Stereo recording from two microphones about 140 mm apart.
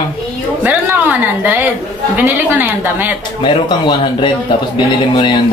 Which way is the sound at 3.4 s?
35° left (ahead or behind).